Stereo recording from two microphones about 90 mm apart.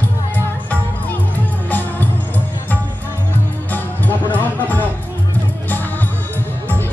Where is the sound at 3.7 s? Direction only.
20° left (ahead or behind).